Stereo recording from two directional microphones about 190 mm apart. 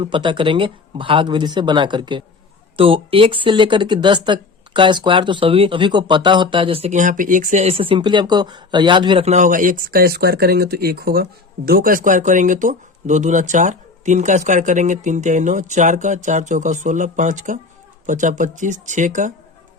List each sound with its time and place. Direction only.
0.0 s speech: 25° right (ahead or behind)